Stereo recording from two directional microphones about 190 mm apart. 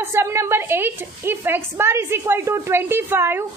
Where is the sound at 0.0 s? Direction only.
15° right (ahead or behind).